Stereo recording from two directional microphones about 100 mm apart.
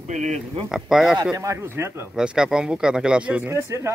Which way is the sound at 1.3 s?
30° right (ahead or behind).